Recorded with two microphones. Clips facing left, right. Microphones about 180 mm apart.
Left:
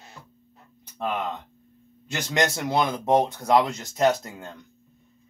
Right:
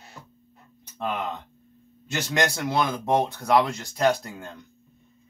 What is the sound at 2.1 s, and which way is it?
Speech, 20° left (ahead or behind).